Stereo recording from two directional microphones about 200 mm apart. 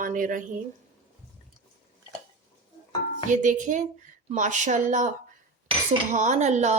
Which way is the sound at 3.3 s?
40° right (ahead or behind).